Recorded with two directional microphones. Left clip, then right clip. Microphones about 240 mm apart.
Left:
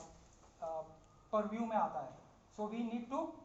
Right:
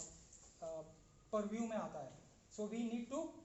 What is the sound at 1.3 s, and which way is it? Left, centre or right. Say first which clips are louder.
A woman's voice: left 5 dB; right.